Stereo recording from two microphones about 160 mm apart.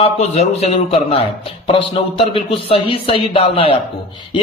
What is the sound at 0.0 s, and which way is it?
Speech, 40° left (ahead or behind).